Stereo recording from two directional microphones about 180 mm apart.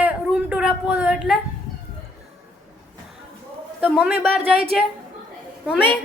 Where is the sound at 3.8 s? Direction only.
5° right (ahead or behind).